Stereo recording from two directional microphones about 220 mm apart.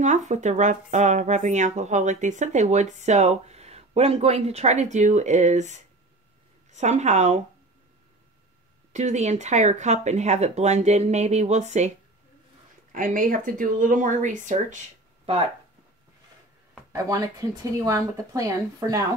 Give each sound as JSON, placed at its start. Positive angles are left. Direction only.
{"t": 0.0, "sound": "speech", "side_deg": -35}
{"t": 8.9, "sound": "speech", "side_deg": -30}
{"t": 12.9, "sound": "speech", "side_deg": -40}
{"t": 16.9, "sound": "speech", "side_deg": -15}